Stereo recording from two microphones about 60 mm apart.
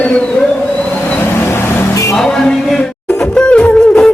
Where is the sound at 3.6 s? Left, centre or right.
Centre.